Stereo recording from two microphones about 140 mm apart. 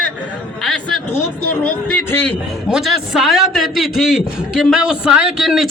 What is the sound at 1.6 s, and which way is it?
Speech, 10° left (ahead or behind).